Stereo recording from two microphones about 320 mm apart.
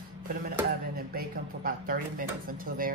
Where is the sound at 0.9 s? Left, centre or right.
Right.